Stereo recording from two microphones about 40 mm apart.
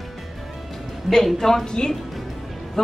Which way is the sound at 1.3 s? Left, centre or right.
Centre.